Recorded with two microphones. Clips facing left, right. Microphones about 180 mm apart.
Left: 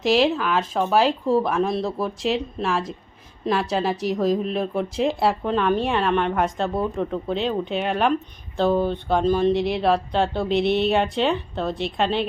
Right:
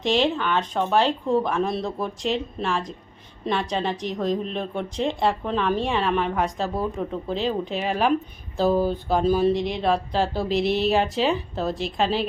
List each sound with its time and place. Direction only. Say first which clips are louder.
0.0 s a woman's voice: left 3 dB; 5° left (ahead or behind)